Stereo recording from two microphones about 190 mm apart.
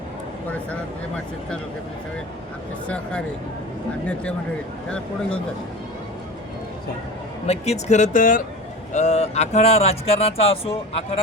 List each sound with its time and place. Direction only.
0.5 s speech: 5° left (ahead or behind)
2.8 s speech: 5° left (ahead or behind)
7.4 s speech: 35° left (ahead or behind)